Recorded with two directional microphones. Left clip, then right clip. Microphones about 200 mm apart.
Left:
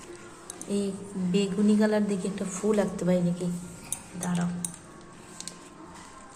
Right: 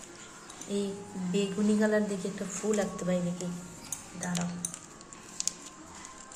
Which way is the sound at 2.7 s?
20° left (ahead or behind).